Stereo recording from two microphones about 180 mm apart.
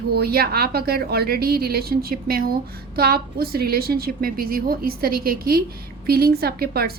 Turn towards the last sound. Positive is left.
turn(degrees=-60)  # may be behind; listen again after turning